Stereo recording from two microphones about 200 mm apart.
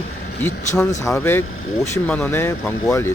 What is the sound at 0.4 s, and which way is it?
Speech, 15° left (ahead or behind).